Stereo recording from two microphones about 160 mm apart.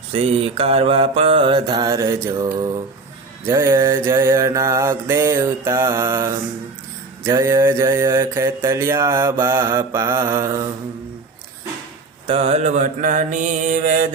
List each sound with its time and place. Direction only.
0.1 s mantra: 35° right (ahead or behind); by 2.1 s 20° right (ahead or behind)
3.4 s mantra: 15° right (ahead or behind)
12.3 s mantra: 40° right (ahead or behind)